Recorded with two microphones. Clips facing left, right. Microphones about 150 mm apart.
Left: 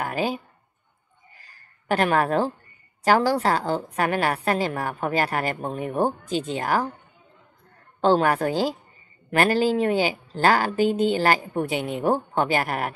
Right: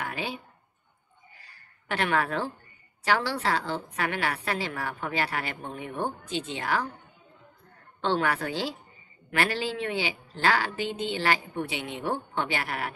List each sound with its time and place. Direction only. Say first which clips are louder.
0.0 s speech: left 8 dB; 45° left (ahead or behind)
1.4 s a sound: left 1 dB; 40° left (ahead or behind)
3.0 s a woman's voice: left 7 dB; 45° left (ahead or behind)
8.0 s a woman's voice: left 7 dB; 45° left (ahead or behind)